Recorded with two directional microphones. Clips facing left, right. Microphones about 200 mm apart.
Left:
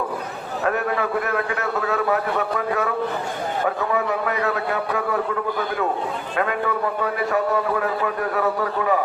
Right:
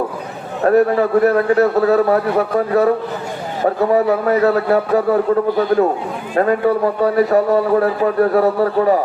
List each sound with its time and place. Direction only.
0.6 s a man's voice: 35° right (ahead or behind)